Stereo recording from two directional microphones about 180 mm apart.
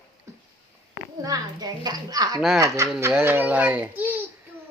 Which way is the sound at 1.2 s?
20° right (ahead or behind).